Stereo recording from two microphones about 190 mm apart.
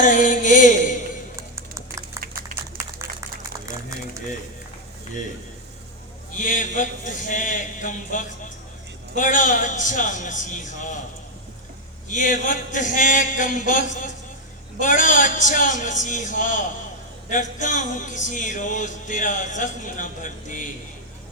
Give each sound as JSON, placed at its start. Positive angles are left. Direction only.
{"t": 0.0, "sound": "speech", "side_deg": 40}
{"t": 1.4, "sound": "typing", "side_deg": -15}
{"t": 6.3, "sound": "a sound", "side_deg": 45}
{"t": 9.1, "sound": "speech", "side_deg": 40}
{"t": 12.0, "sound": "a sound", "side_deg": 40}
{"t": 14.8, "sound": "speech", "side_deg": 40}